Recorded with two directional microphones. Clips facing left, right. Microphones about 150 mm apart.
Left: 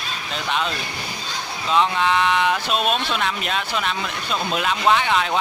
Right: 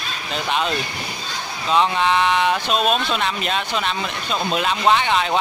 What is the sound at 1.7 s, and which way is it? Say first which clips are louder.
Speech: right 1 dB; centre (ahead or behind).